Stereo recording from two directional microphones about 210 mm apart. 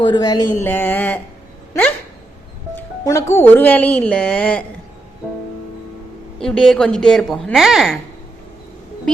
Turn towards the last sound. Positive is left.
turn(degrees=0)  # may be behind; listen again after turning